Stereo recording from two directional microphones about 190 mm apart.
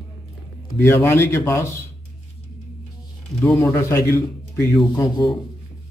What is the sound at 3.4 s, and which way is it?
A man's voice, 10° left (ahead or behind).